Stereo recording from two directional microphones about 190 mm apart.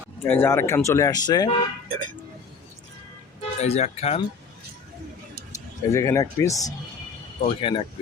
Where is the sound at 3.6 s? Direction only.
35° left (ahead or behind).